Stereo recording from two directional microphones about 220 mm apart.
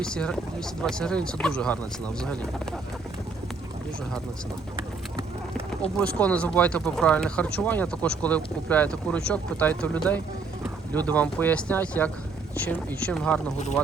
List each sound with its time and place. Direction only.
0.0 s speech: 5° left (ahead or behind)
4.8 s a sound: 25° right (ahead or behind)
6.0 s speech: 5° left (ahead or behind)